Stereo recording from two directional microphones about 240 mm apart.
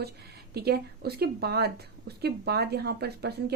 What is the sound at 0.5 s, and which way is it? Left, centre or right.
Speech, right.